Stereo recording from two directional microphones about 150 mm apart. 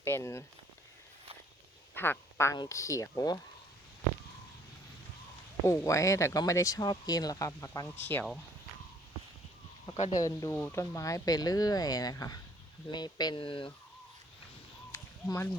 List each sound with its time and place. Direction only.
0.0 s speech: 15° left (ahead or behind)
2.0 s speech: 15° left (ahead or behind)
5.6 s speech: 20° left (ahead or behind)
10.1 s speech: 25° left (ahead or behind)
14.9 s a sound: 20° left (ahead or behind)